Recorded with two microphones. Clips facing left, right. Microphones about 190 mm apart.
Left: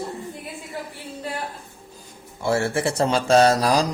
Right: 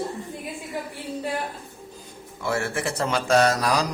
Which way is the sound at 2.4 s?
30° left (ahead or behind).